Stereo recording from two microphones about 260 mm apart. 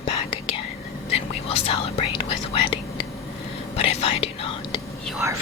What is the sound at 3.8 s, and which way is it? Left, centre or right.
Speech, left.